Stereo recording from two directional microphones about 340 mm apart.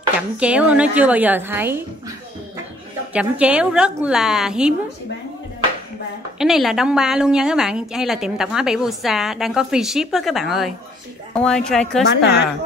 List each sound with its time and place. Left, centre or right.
0.4 s a woman's voice: centre
6.3 s a woman's voice: centre
12.1 s a woman's voice: left